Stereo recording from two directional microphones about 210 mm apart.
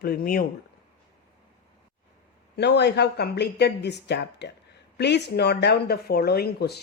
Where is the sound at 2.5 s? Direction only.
55° left (ahead or behind).